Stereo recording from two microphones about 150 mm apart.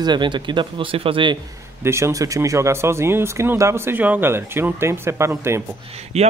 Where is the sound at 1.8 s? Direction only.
15° right (ahead or behind).